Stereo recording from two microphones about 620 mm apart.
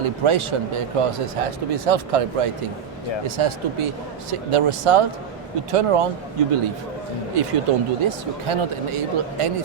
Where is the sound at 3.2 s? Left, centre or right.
Right.